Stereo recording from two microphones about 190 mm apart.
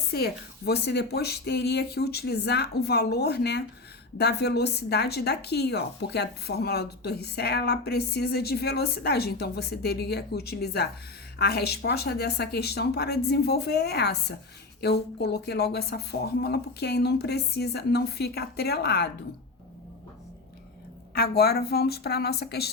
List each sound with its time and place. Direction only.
0.1 s a woman's voice: 55° left (ahead or behind)
21.2 s a woman's voice: 55° left (ahead or behind)